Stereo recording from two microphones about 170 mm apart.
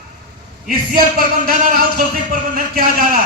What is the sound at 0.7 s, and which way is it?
Speech, 60° right (ahead or behind).